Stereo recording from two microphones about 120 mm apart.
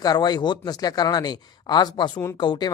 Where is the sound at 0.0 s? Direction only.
35° left (ahead or behind).